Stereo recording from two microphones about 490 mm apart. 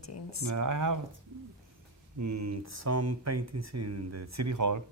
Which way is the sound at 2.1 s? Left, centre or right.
Right.